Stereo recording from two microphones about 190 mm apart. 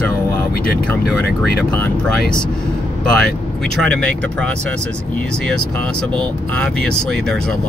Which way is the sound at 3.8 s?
5° left (ahead or behind).